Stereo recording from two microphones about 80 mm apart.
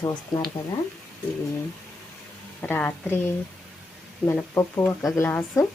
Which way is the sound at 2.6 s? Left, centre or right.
Left.